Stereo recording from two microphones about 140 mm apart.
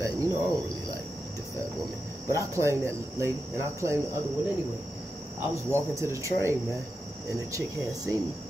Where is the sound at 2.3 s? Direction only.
20° right (ahead or behind).